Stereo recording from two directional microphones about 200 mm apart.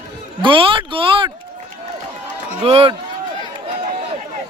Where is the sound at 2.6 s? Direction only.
30° right (ahead or behind).